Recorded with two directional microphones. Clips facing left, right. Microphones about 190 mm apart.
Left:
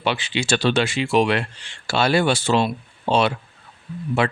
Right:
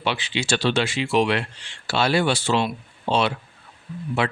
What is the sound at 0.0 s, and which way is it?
Speech, 50° left (ahead or behind).